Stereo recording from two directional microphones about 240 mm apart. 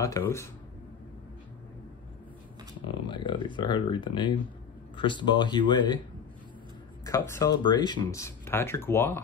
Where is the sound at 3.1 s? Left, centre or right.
Centre.